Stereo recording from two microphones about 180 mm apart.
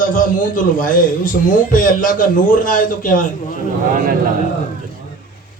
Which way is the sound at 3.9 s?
50° right (ahead or behind).